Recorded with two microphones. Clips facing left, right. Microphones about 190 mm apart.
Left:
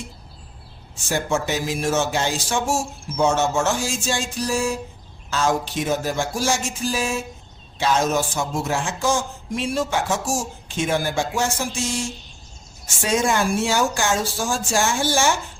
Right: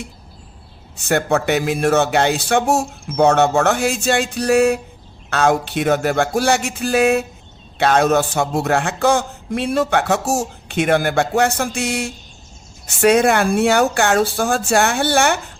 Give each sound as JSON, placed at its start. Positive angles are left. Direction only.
{"t": 0.9, "sound": "a man's voice", "side_deg": -60}